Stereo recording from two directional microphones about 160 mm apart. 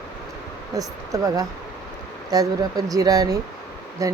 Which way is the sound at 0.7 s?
20° right (ahead or behind).